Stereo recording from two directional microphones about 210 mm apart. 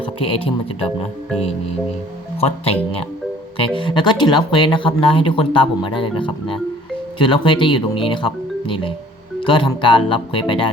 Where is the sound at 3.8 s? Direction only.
20° left (ahead or behind).